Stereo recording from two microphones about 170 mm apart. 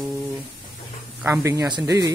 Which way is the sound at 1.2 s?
15° right (ahead or behind).